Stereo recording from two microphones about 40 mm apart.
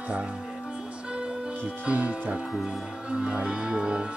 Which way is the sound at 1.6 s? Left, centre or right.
Right.